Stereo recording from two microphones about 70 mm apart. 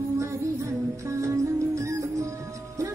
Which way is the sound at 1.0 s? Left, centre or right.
Right.